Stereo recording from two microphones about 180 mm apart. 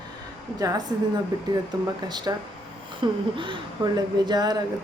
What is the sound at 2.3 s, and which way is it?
Speech, 20° right (ahead or behind).